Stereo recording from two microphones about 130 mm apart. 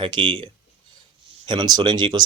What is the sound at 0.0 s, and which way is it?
Speech, 35° right (ahead or behind).